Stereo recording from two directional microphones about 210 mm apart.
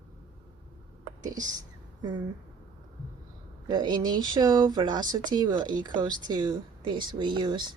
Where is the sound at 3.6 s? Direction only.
20° right (ahead or behind).